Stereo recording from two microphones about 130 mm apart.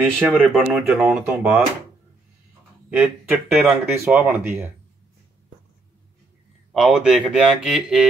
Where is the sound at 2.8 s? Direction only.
10° right (ahead or behind).